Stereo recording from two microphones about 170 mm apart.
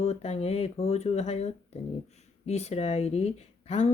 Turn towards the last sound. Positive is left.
turn(degrees=40)  # may be behind; listen again after turning